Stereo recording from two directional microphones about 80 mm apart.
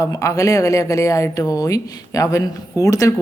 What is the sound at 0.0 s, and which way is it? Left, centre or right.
Speech, left.